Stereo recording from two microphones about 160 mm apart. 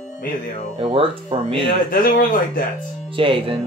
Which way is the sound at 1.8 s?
65° left (ahead or behind).